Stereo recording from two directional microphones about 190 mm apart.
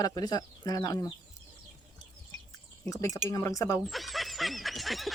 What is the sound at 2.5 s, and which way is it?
Bird, 20° left (ahead or behind).